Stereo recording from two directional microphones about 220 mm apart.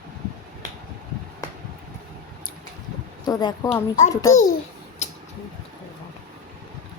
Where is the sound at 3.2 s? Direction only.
20° left (ahead or behind).